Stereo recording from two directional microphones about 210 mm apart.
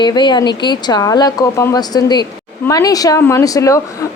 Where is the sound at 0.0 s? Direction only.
20° left (ahead or behind).